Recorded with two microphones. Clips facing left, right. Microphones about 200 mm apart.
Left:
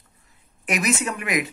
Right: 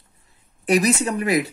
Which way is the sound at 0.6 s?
35° right (ahead or behind).